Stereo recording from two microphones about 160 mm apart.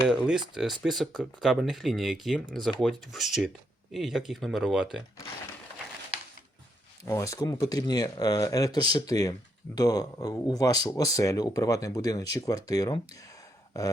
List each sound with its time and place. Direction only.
0.1 s speech: 5° right (ahead or behind)
7.0 s speech: 20° left (ahead or behind)